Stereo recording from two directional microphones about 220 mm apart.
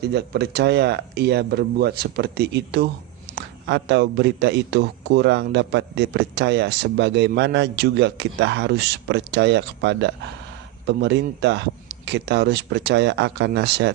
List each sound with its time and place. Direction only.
0.0 s a man's voice: 50° right (ahead or behind)